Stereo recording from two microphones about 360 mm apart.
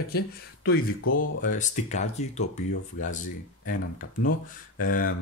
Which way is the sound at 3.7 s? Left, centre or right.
Left.